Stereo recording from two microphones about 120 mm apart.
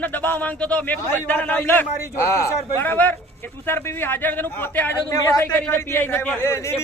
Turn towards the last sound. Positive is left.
turn(degrees=20)  # may be behind; listen again after turning